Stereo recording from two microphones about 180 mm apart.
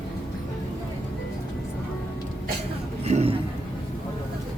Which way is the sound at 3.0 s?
35° right (ahead or behind).